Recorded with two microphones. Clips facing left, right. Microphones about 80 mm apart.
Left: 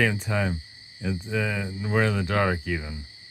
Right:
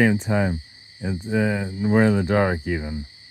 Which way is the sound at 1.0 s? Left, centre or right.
Right.